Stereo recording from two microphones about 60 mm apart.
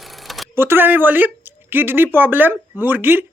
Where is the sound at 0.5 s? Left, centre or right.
Right.